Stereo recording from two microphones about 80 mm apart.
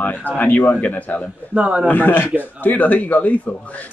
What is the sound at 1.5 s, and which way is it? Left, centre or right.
Speech, centre.